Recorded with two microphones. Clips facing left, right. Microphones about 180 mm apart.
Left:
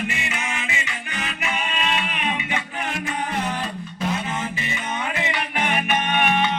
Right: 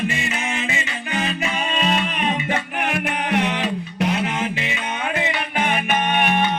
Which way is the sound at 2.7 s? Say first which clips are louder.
Right 4 dB; 70° right (ahead or behind).